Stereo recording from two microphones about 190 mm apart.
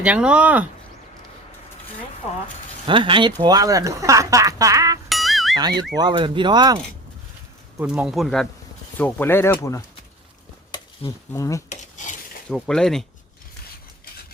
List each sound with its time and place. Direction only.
0.0 s speech: 5° right (ahead or behind)
2.8 s speech: 25° right (ahead or behind)
5.0 s music: centre (ahead or behind)
6.0 s speech: 25° right (ahead or behind)
7.8 s speech: 5° right (ahead or behind); by 9.8 s 15° left (ahead or behind)
11.3 s speech: 15° left (ahead or behind)
11.7 s dishes: 40° left (ahead or behind)
12.5 s speech: 5° left (ahead or behind)